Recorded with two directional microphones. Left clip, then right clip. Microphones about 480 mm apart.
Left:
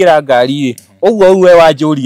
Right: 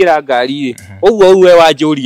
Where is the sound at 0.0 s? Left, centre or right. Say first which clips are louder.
Left 2 dB; centre.